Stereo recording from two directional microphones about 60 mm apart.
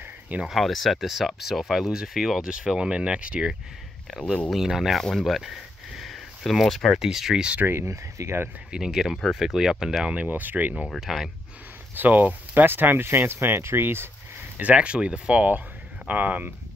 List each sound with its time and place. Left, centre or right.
0.5 s speech: centre
4.1 s speech: centre
5.1 s a sound: centre
7.0 s speech: centre
7.6 s speech: right
7.9 s speech: right
8.7 s speech: centre
10.1 s speech: right
11.0 s speech: centre
11.9 s speech: right
14.6 s speech: right